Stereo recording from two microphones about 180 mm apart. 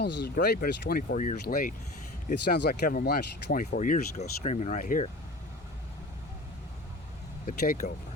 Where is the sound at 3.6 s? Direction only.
40° left (ahead or behind).